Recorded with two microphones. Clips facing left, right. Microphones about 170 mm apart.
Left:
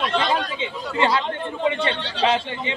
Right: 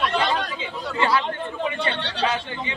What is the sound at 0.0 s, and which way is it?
Chatter, 25° left (ahead or behind).